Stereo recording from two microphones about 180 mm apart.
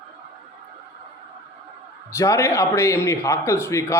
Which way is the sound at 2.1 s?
15° left (ahead or behind).